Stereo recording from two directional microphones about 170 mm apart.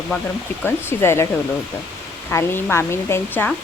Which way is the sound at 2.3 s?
15° left (ahead or behind).